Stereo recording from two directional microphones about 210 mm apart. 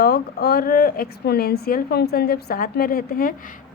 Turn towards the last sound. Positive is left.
turn(degrees=45)  # may be behind; listen again after turning